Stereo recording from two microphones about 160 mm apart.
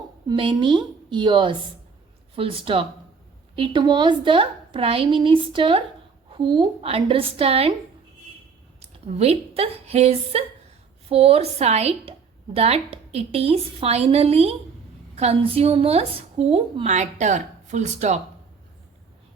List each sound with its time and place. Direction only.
0.3 s a woman's voice: 30° right (ahead or behind)
8.8 s a woman's voice: 40° right (ahead or behind)